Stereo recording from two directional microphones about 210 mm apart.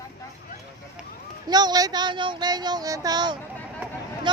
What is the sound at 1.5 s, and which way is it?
Speech, 20° right (ahead or behind).